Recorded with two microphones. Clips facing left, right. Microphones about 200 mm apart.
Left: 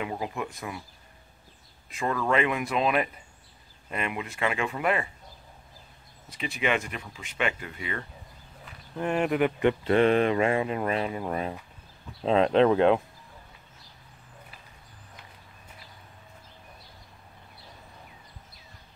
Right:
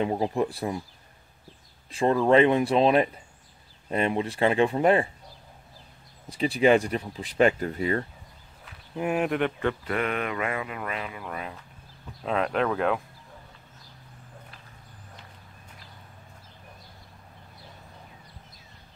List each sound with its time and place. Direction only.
0.0 s speech: 35° right (ahead or behind)
1.9 s speech: 30° right (ahead or behind)
6.3 s speech: 35° right (ahead or behind)
8.9 s speech: 5° right (ahead or behind)
9.6 s speech: 20° left (ahead or behind)